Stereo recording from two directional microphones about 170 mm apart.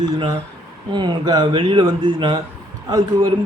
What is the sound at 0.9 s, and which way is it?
A man's voice, 25° right (ahead or behind).